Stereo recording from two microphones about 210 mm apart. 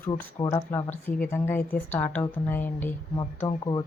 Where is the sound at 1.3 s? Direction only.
10° left (ahead or behind).